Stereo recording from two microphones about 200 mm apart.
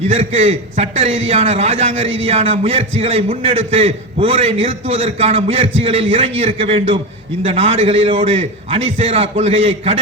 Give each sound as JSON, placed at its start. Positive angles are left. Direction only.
{"t": 0.1, "sound": "a man's voice", "side_deg": -30}